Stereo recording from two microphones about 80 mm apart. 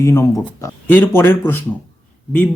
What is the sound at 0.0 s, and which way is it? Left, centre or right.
Speech, left.